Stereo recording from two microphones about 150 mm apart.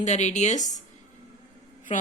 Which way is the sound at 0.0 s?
50° left (ahead or behind).